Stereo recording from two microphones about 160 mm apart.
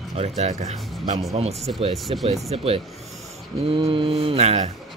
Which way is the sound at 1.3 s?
40° right (ahead or behind).